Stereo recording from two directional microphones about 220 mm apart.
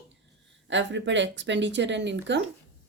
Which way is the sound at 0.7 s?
55° right (ahead or behind).